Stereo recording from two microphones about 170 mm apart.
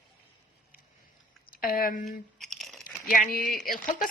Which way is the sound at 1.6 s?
55° left (ahead or behind).